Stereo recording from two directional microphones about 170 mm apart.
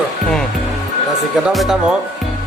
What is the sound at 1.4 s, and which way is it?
Speech, centre (ahead or behind).